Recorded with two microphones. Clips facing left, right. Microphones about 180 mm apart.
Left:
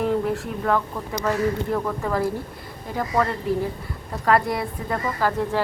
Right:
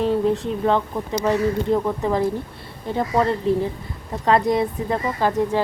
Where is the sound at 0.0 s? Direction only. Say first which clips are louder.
Right 3 dB; 25° right (ahead or behind).